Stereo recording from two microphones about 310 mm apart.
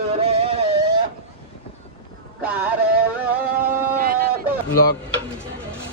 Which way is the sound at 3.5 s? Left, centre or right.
Right.